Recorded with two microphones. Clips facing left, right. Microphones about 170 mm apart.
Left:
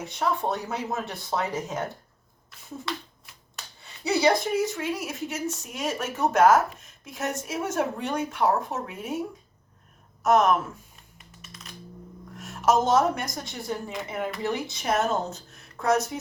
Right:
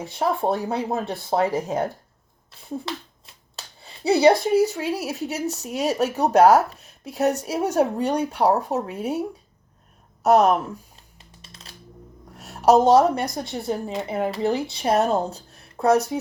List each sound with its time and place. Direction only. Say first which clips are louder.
0.0 s speech: right 4 dB; 30° right (ahead or behind)
2.5 s a sound: right 4 dB; 30° right (ahead or behind)
3.8 s speech: right 6 dB; 30° right (ahead or behind)
10.2 s typing: right 4 dB; 35° right (ahead or behind)
12.4 s speech: right 6 dB; 35° right (ahead or behind)